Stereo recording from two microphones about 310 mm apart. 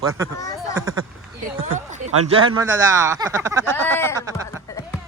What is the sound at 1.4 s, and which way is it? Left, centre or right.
Speech, right.